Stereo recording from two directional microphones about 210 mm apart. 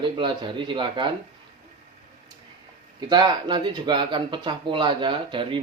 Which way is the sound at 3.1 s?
20° right (ahead or behind).